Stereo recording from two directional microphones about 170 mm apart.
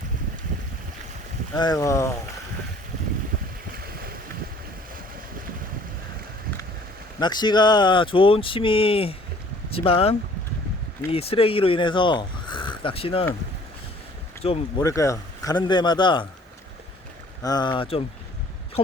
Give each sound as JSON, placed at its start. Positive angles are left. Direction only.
{"t": 1.5, "sound": "speech", "side_deg": 20}
{"t": 7.2, "sound": "speech", "side_deg": 25}
{"t": 14.4, "sound": "speech", "side_deg": 35}
{"t": 14.8, "sound": "a man's voice", "side_deg": 20}
{"t": 17.4, "sound": "a man's voice", "side_deg": 25}